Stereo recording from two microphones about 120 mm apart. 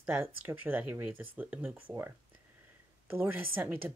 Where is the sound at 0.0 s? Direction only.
20° right (ahead or behind).